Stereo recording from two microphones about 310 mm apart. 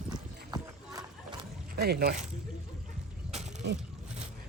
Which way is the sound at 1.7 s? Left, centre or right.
Right.